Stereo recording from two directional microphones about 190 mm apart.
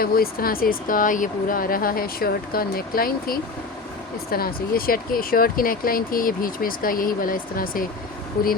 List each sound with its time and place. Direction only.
0.0 s speech: 50° left (ahead or behind)